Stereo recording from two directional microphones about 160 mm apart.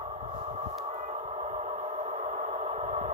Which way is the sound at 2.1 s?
45° right (ahead or behind).